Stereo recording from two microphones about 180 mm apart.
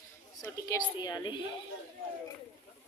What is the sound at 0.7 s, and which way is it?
Speech, 15° left (ahead or behind).